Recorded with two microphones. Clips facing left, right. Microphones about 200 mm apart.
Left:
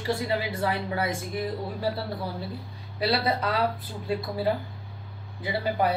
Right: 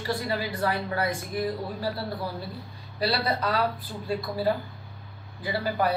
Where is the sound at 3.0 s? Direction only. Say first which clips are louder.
Left 1 dB; 20° left (ahead or behind).